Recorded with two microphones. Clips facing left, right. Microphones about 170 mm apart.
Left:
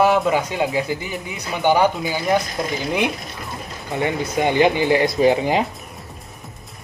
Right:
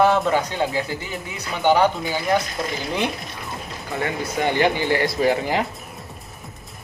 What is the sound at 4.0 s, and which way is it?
Speech, 20° left (ahead or behind).